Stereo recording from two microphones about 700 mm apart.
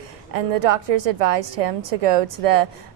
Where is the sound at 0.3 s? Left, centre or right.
Right.